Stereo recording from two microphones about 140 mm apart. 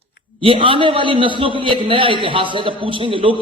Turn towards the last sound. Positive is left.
turn(degrees=-40)  # may be behind; listen again after turning